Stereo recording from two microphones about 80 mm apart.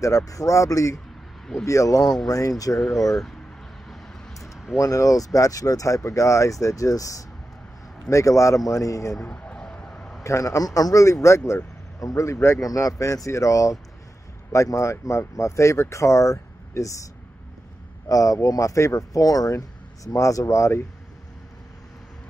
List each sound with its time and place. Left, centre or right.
0.0 s speech: left
2.8 s speech: centre
4.3 s a sound: centre
4.7 s speech: left
9.1 s a sound: centre
10.2 s speech: left
18.0 s speech: left